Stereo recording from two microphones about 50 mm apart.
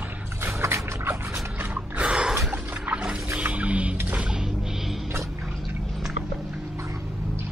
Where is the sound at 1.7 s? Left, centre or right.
Right.